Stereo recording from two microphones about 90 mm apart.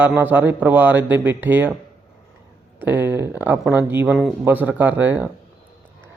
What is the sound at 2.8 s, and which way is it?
Speech, 20° right (ahead or behind).